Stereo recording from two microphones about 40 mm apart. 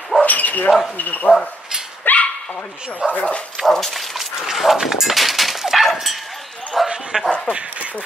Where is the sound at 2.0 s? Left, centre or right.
Left.